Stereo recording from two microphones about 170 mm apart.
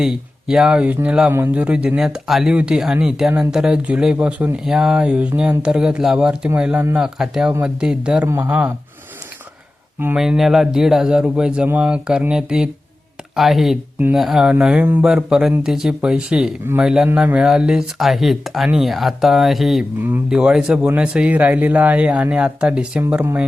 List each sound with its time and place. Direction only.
0.0 s speech: 5° right (ahead or behind)
10.0 s speech: 5° right (ahead or behind)